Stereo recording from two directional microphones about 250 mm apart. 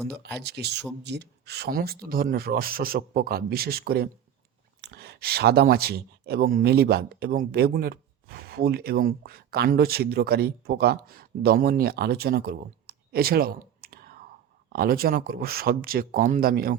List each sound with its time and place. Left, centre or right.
0.1 s speech: right